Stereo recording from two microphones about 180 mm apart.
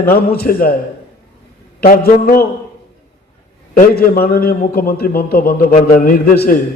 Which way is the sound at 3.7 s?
55° left (ahead or behind).